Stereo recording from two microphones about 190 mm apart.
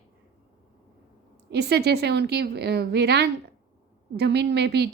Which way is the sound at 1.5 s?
60° right (ahead or behind).